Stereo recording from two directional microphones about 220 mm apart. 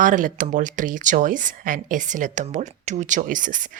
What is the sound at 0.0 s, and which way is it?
Speech, 35° right (ahead or behind).